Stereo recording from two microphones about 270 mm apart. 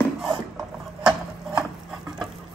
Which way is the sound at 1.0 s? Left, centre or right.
Centre.